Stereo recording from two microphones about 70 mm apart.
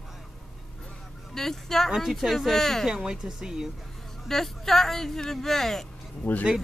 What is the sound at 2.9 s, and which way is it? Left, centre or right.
Speech, centre.